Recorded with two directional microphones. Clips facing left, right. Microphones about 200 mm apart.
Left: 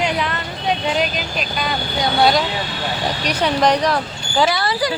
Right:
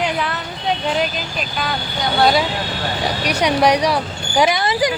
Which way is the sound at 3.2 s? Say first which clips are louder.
Right 1 dB; 10° right (ahead or behind).